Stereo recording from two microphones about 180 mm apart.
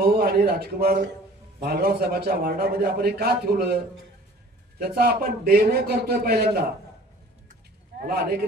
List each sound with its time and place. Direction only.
0.0 s a man's voice: 60° right (ahead or behind)
4.7 s a man's voice: 55° right (ahead or behind)
8.0 s a man's voice: 55° right (ahead or behind)